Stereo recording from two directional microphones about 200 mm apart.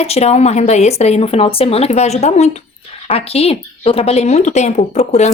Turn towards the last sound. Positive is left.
turn(degrees=35)  # may be behind; listen again after turning